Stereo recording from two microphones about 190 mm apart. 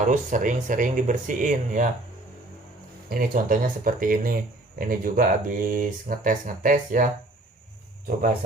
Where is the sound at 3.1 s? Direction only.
45° right (ahead or behind).